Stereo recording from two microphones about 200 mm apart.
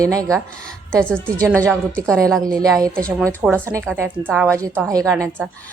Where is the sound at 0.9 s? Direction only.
5° left (ahead or behind).